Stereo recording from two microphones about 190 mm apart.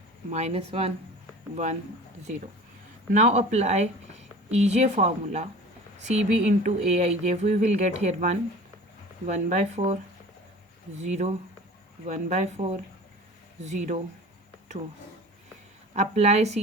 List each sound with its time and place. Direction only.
0.3 s a woman's voice: 35° right (ahead or behind)
3.1 s a woman's voice: 40° right (ahead or behind)
15.9 s a woman's voice: 35° right (ahead or behind)